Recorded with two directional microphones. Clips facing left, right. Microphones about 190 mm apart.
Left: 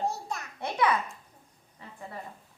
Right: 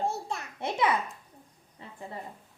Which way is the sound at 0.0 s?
30° right (ahead or behind).